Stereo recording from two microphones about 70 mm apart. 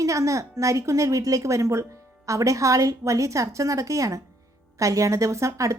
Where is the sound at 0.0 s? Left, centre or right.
Right.